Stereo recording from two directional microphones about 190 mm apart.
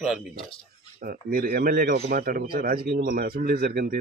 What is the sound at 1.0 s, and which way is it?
Speech, 50° right (ahead or behind).